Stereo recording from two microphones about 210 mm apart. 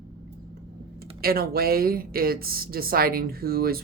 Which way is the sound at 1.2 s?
45° right (ahead or behind).